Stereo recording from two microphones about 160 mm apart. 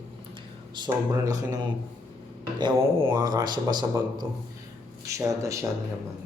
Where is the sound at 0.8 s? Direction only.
20° right (ahead or behind).